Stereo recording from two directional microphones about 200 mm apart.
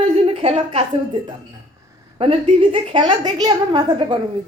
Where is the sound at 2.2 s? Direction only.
25° right (ahead or behind).